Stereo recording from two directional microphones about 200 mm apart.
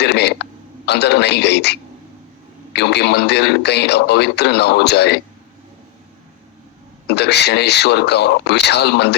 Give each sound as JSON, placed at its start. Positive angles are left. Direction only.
{"t": 0.0, "sound": "throat clearing", "side_deg": 55}
{"t": 0.9, "sound": "a man's voice", "side_deg": 55}
{"t": 2.7, "sound": "a man's voice", "side_deg": 55}
{"t": 7.2, "sound": "a man's voice", "side_deg": 55}